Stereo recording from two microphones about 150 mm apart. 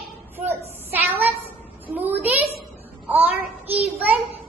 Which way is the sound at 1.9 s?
10° right (ahead or behind).